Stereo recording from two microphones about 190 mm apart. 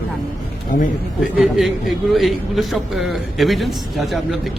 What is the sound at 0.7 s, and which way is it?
Speech, 40° left (ahead or behind).